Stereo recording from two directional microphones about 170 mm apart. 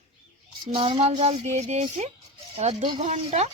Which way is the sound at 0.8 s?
35° right (ahead or behind).